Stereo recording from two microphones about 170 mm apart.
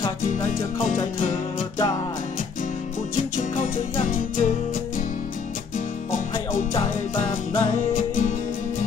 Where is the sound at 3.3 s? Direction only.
50° left (ahead or behind).